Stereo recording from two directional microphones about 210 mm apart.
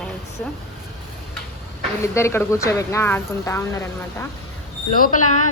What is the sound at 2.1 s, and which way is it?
A woman's voice, 10° left (ahead or behind).